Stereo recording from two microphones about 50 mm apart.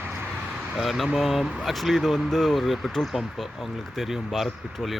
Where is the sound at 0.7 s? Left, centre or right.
Centre.